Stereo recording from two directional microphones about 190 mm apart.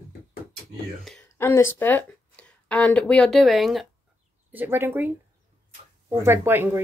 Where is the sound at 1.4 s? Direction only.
15° left (ahead or behind).